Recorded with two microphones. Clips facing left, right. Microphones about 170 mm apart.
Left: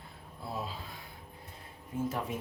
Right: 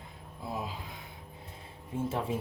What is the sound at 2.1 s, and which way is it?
Speech, 30° right (ahead or behind).